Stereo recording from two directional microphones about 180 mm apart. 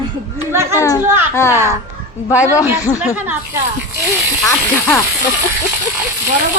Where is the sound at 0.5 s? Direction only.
15° right (ahead or behind).